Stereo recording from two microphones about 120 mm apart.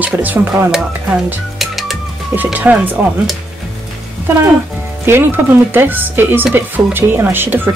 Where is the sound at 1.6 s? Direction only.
Centre (ahead or behind).